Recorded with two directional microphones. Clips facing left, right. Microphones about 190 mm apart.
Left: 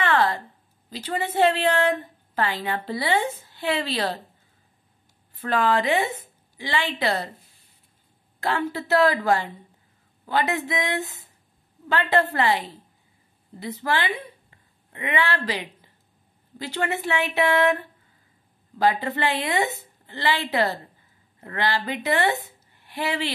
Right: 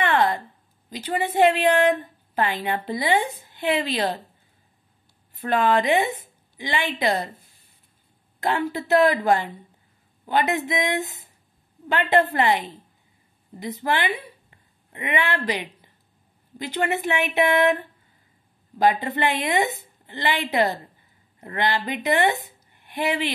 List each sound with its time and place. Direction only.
0.0 s a sound: 20° right (ahead or behind)
0.8 s a woman's voice: 15° right (ahead or behind)
5.3 s a woman's voice: 20° right (ahead or behind)
8.4 s a woman's voice: 20° right (ahead or behind)